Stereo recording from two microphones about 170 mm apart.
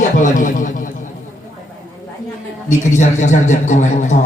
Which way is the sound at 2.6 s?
45° left (ahead or behind).